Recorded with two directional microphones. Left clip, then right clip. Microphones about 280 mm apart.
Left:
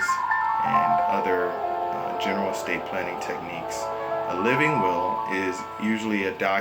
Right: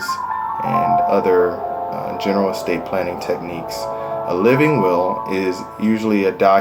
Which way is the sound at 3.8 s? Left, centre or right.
Left.